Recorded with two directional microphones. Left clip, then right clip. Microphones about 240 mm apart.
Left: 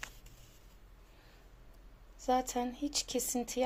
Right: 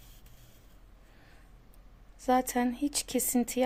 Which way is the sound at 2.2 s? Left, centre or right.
Right.